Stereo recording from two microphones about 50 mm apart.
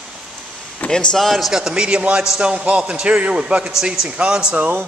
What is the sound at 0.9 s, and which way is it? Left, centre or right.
Speech, centre.